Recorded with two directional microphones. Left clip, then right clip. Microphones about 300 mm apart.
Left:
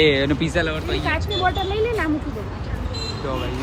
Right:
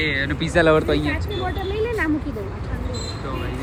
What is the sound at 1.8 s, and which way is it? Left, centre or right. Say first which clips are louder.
Speech: even; centre.